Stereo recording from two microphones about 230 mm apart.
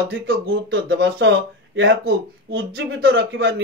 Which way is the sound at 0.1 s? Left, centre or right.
Right.